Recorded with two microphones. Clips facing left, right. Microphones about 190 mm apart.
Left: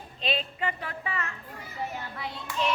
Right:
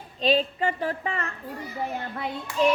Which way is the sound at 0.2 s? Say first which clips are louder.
Right 8 dB; 35° right (ahead or behind).